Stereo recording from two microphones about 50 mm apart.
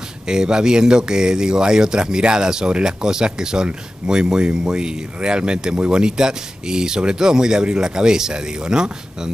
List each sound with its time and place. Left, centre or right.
0.3 s speech: centre